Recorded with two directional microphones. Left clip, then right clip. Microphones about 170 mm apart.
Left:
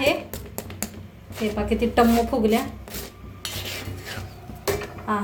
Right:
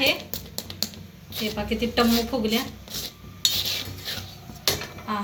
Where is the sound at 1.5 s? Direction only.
55° left (ahead or behind).